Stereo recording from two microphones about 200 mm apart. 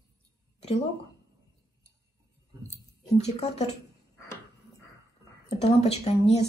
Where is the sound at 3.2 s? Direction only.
35° left (ahead or behind).